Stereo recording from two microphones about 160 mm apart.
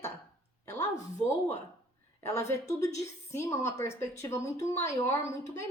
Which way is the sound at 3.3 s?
20° left (ahead or behind).